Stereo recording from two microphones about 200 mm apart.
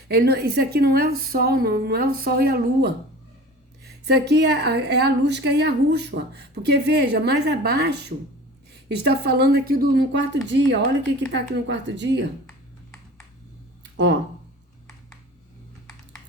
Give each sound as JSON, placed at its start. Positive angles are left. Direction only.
{"t": 0.1, "sound": "a woman's voice", "side_deg": -50}
{"t": 4.0, "sound": "a woman's voice", "side_deg": -55}
{"t": 9.0, "sound": "a woman's voice", "side_deg": -55}
{"t": 13.9, "sound": "speech", "side_deg": -60}